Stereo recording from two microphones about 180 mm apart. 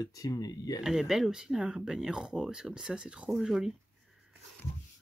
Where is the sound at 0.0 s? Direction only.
20° left (ahead or behind).